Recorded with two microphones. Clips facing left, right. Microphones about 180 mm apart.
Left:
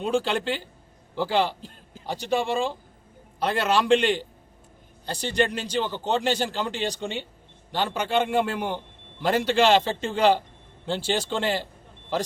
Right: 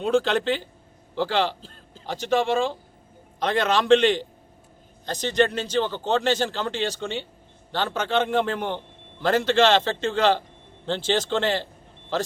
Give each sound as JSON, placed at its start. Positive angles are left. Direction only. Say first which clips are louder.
{"t": 0.0, "sound": "a man's voice", "louder": "right 3 dB", "side_deg": 10}
{"t": 3.4, "sound": "speech", "louder": "right 1 dB", "side_deg": 10}